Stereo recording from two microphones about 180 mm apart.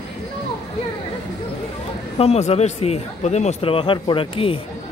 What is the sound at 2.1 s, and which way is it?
A man's voice, 35° left (ahead or behind).